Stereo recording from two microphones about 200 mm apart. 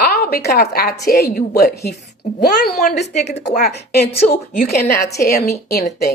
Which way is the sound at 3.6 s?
55° left (ahead or behind).